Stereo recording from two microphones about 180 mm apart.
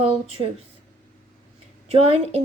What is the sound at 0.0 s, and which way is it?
Speech, 30° right (ahead or behind).